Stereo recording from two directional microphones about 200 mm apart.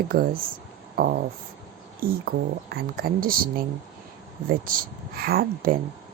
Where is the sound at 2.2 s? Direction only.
50° right (ahead or behind).